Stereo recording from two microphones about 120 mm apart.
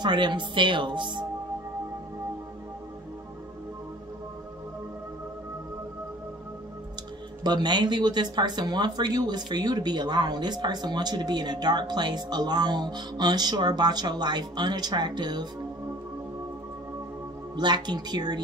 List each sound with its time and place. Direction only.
0.0 s speech: 40° right (ahead or behind)
7.4 s speech: 35° right (ahead or behind)
17.6 s speech: 40° right (ahead or behind)